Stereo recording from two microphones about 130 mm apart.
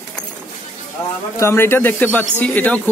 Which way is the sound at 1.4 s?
20° left (ahead or behind).